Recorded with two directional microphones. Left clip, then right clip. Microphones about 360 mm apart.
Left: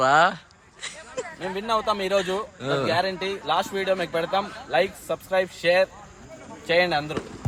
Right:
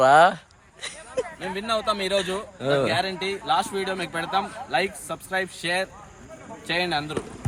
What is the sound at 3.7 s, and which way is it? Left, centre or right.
A man's voice, centre.